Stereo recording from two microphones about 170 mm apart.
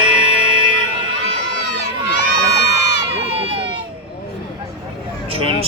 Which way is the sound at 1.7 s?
90° left.